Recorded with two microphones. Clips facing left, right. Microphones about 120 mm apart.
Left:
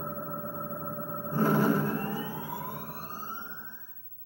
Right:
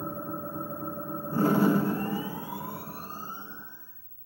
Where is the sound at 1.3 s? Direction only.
10° right (ahead or behind).